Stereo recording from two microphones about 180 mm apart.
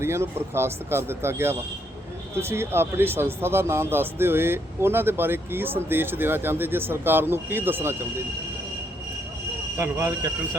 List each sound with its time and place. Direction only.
0.0 s speech: 15° right (ahead or behind)
9.7 s speech: 15° right (ahead or behind)